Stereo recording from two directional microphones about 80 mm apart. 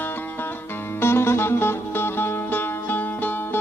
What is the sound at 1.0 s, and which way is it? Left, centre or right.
Music, left.